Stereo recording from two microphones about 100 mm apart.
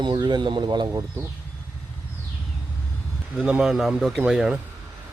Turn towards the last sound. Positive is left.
turn(degrees=-5)  # may be behind; listen again after turning